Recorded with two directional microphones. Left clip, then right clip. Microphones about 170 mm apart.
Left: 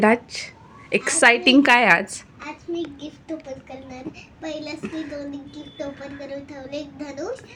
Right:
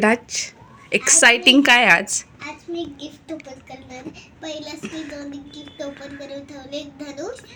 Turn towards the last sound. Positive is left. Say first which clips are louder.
# left 1 dB
turn(degrees=5)  # may be behind; listen again after turning